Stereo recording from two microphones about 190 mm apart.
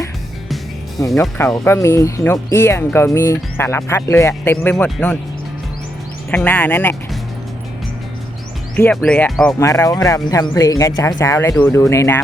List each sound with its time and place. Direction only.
0.4 s music: centre (ahead or behind)
1.0 s speech: 15° left (ahead or behind)
6.3 s speech: 5° left (ahead or behind)
8.7 s speech: 5° left (ahead or behind)
9.6 s speech: 15° left (ahead or behind)